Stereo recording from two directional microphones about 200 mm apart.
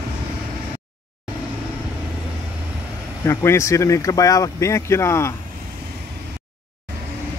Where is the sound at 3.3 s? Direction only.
15° left (ahead or behind).